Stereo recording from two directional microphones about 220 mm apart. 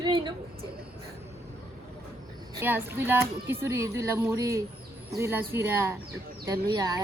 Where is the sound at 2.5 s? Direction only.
10° right (ahead or behind).